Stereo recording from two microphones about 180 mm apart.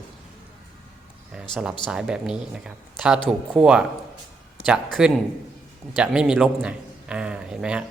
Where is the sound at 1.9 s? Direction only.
5° right (ahead or behind).